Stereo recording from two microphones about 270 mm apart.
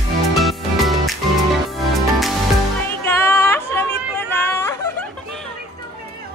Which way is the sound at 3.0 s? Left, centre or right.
Centre.